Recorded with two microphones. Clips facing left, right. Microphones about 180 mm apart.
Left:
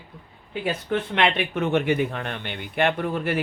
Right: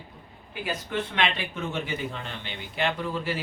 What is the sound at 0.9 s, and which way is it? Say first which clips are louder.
Speech: left 5 dB; 65° left (ahead or behind).